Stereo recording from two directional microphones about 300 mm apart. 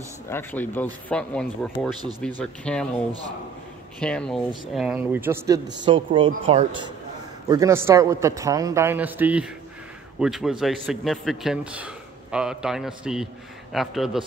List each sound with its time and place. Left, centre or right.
0.3 s a man's voice: centre
2.0 s a man's voice: centre
2.4 s a man's voice: centre
3.1 s a man's voice: centre
4.0 s a man's voice: centre